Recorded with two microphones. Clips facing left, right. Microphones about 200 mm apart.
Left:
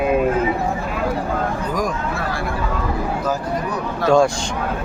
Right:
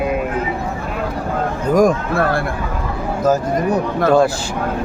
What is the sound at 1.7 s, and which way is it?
Speech, 50° right (ahead or behind).